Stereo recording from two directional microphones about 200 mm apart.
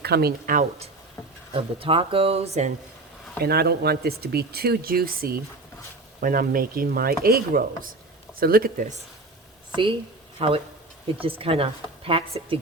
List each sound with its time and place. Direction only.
0.0 s speech: 50° right (ahead or behind)
1.5 s a woman's voice: 25° right (ahead or behind)
3.4 s speech: 50° right (ahead or behind)
10.3 s a woman's voice: 30° right (ahead or behind)